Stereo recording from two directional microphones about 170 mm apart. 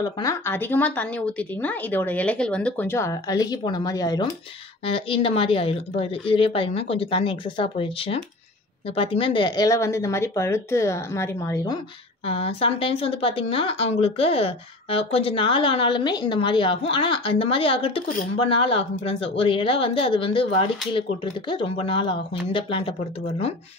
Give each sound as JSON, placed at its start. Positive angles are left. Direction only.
{"t": 0.0, "sound": "a woman's voice", "side_deg": 20}
{"t": 4.8, "sound": "a woman's voice", "side_deg": 30}
{"t": 12.3, "sound": "speech", "side_deg": 35}